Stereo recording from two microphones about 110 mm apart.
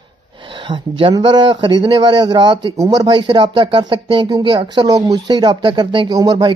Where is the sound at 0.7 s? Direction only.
50° right (ahead or behind).